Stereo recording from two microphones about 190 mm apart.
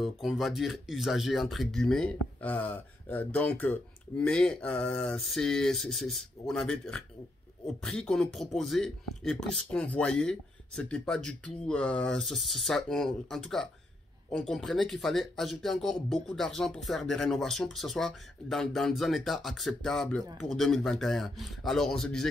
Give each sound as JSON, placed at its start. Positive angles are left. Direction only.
{"t": 0.0, "sound": "speech", "side_deg": 0}